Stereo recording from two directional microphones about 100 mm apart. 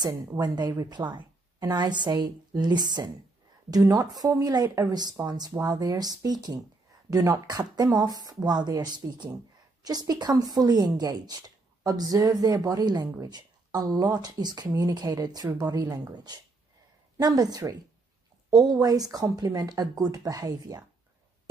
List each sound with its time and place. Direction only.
0.0 s a woman's voice: 45° right (ahead or behind)